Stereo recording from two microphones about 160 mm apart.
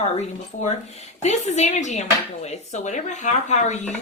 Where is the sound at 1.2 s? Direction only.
45° left (ahead or behind).